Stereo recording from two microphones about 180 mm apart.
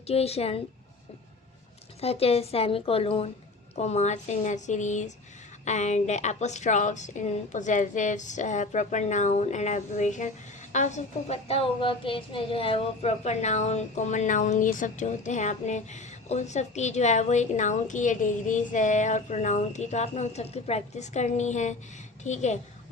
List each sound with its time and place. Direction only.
0.1 s a woman's voice: 35° left (ahead or behind)
2.0 s a woman's voice: 35° left (ahead or behind)